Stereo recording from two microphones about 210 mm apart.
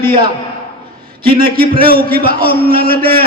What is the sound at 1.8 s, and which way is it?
Speech, 45° right (ahead or behind).